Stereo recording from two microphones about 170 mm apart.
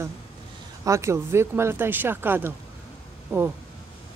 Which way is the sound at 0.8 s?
15° right (ahead or behind).